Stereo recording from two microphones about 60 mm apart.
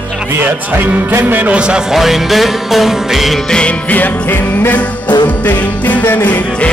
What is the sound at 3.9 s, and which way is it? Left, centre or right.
Music, left.